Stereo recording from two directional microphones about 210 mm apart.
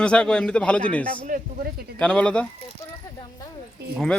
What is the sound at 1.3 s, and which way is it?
Speech, 45° right (ahead or behind).